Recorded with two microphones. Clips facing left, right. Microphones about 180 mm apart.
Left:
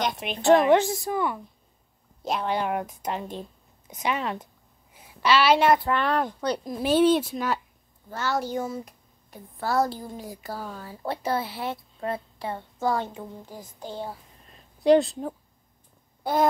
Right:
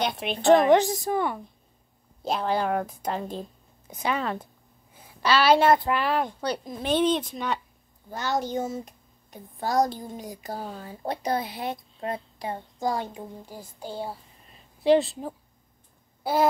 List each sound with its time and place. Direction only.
0.0 s a woman's voice: 30° right (ahead or behind)
2.2 s a woman's voice: 35° right (ahead or behind)
5.9 s speech: 5° right (ahead or behind)
8.1 s speech: 15° right (ahead or behind)
10.6 s a woman's voice: 35° right (ahead or behind)
10.9 s speech: 20° right (ahead or behind); by 15.3 s centre (ahead or behind)